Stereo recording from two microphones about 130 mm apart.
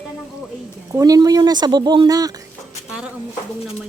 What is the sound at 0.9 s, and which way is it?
Speech, 25° right (ahead or behind).